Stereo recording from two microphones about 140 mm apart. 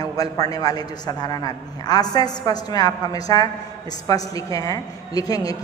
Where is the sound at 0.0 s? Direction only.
25° left (ahead or behind).